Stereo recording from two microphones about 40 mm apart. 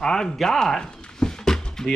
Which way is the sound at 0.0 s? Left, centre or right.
Centre.